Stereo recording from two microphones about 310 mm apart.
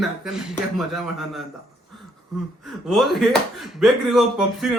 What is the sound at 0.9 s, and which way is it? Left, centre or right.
Speech, centre.